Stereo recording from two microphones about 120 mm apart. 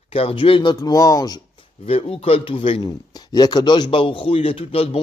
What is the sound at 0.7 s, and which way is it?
Speech, 30° left (ahead or behind).